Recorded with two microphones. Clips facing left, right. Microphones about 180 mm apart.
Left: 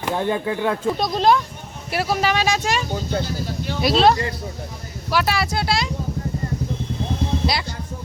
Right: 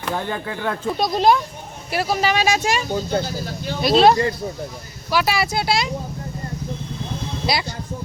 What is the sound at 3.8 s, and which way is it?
Speech, centre (ahead or behind).